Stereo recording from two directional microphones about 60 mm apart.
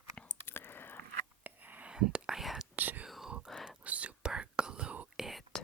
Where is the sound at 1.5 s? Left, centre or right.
Right.